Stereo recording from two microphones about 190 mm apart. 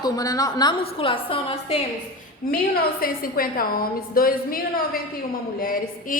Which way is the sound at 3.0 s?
50° left (ahead or behind).